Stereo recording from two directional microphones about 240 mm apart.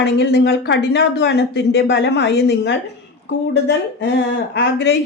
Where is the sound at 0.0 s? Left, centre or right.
Left.